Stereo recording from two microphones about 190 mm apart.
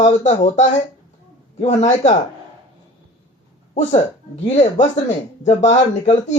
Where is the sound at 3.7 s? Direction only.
40° left (ahead or behind).